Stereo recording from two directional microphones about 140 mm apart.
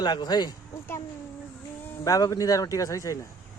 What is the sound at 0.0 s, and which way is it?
Speech, 30° left (ahead or behind).